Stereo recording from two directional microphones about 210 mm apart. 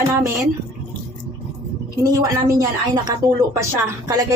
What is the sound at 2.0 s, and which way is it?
Speech, 15° right (ahead or behind).